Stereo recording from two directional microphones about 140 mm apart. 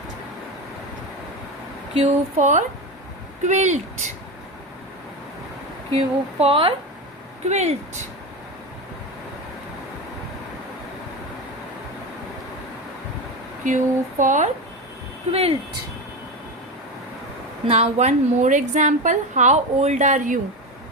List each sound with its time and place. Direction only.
2.4 s a woman's voice: 60° right (ahead or behind)
5.9 s speech: 45° right (ahead or behind)
7.4 s speech: 50° right (ahead or behind)
13.7 s a woman's voice: 65° right (ahead or behind)
15.3 s speech: 45° right (ahead or behind)
17.7 s a woman's voice: 50° right (ahead or behind); by 20.4 s 65° right (ahead or behind)